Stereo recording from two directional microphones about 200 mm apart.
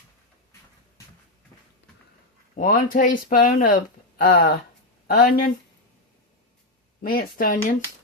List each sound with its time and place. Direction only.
2.6 s speech: 45° left (ahead or behind)
7.0 s speech: 45° left (ahead or behind)